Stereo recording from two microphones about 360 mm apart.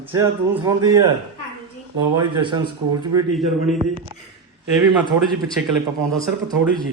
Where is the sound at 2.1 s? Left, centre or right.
Centre.